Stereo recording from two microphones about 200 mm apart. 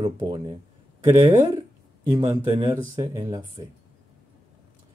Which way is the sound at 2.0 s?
20° right (ahead or behind).